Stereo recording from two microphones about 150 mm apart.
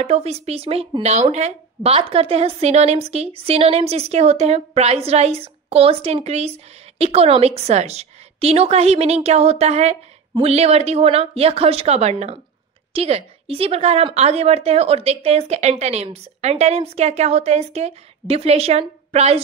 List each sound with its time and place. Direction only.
0.0 s speech: 45° right (ahead or behind)